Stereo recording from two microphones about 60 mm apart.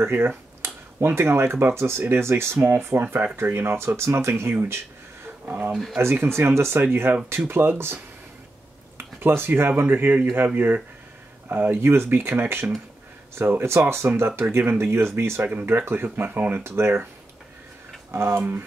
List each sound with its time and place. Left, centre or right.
0.0 s speech: right
6.2 s speech: right
8.9 s a sound: right
9.6 s speech: right
15.4 s speech: right
18.1 s speech: right